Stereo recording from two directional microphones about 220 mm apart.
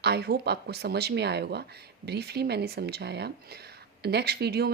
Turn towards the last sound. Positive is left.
turn(degrees=-45)  # may be behind; listen again after turning